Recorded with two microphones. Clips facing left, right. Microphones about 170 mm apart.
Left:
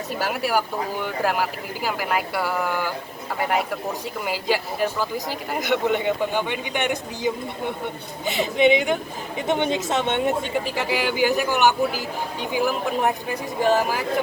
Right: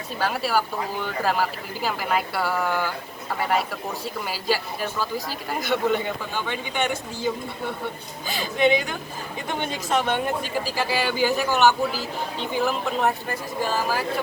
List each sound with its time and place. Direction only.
0.3 s speech: 15° left (ahead or behind)
4.3 s speech: 15° left (ahead or behind)